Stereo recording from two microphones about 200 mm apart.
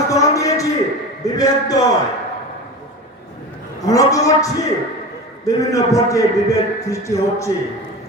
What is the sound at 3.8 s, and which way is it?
A man's voice, 15° left (ahead or behind).